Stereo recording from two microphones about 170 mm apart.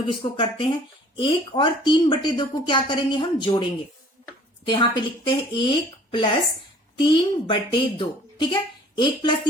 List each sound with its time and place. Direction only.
0.0 s speech: 30° left (ahead or behind)